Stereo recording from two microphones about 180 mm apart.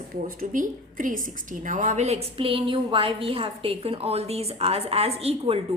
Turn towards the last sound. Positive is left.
turn(degrees=-35)  # may be behind; listen again after turning